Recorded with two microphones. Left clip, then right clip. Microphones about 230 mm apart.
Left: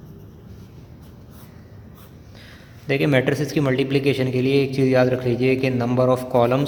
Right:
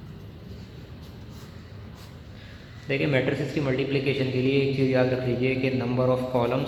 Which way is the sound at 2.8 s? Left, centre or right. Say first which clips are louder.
Left 5 dB; left.